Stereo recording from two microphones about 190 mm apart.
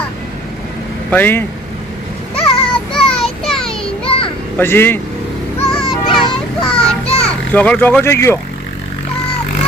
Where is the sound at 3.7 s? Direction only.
30° left (ahead or behind).